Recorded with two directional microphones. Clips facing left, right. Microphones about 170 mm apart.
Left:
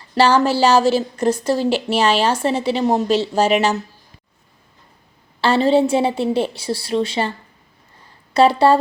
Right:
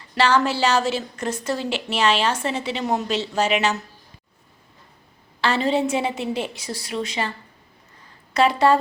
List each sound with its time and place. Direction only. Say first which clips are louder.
0.1 s a woman's voice: left 5 dB; 35° left (ahead or behind)
5.4 s a woman's voice: left 6 dB; 30° left (ahead or behind)